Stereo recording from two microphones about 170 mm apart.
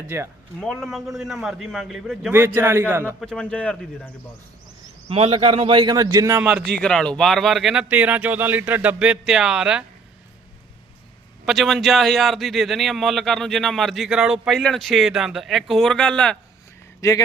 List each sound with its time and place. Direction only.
0.1 s a man's voice: 15° right (ahead or behind)
0.6 s a man's voice: 5° left (ahead or behind)
2.6 s a man's voice: 15° right (ahead or behind)
3.2 s a man's voice: 5° left (ahead or behind)
5.0 s a man's voice: 35° right (ahead or behind); by 6.4 s 20° right (ahead or behind)
6.8 s a man's voice: 5° left (ahead or behind)
11.4 s a man's voice: centre (ahead or behind)
17.0 s a man's voice: 20° left (ahead or behind)